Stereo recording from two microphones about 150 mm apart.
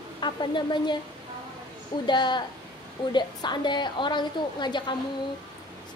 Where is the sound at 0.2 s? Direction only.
30° left (ahead or behind).